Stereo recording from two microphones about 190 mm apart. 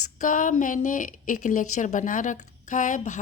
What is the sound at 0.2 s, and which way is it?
Speech, 45° left (ahead or behind).